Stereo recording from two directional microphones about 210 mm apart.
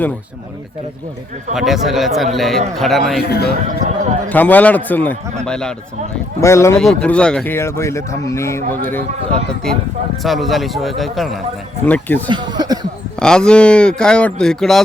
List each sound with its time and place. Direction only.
1.5 s speech: centre (ahead or behind)
3.2 s a man's voice: 50° left (ahead or behind)
3.7 s speech: 35° right (ahead or behind)
4.3 s speech: 10° left (ahead or behind)
12.3 s speech: 20° right (ahead or behind)
13.1 s speech: 5° left (ahead or behind)